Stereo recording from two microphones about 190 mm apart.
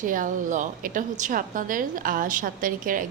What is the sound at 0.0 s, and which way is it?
A woman's voice, 45° right (ahead or behind).